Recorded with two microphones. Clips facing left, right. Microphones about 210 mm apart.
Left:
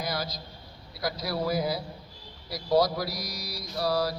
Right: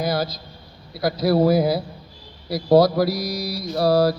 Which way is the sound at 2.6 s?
65° right (ahead or behind).